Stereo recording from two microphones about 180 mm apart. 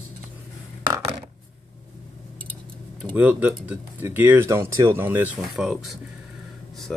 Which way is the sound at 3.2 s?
10° right (ahead or behind).